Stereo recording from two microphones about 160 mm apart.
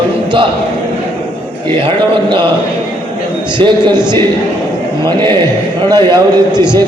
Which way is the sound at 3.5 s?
30° right (ahead or behind).